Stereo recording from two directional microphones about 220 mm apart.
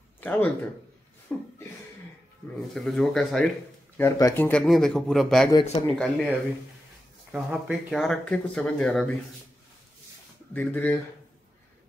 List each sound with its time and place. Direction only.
0.2 s speech: 5° left (ahead or behind)
2.7 s speech: centre (ahead or behind)
5.5 s speech: 20° left (ahead or behind)
5.9 s speech: centre (ahead or behind)
7.3 s speech: 5° right (ahead or behind)
10.5 s speech: 10° left (ahead or behind)